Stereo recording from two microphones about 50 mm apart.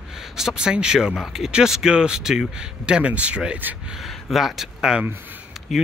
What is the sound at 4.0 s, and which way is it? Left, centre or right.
Speech, centre.